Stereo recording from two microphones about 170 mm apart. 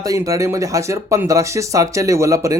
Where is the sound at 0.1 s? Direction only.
20° right (ahead or behind).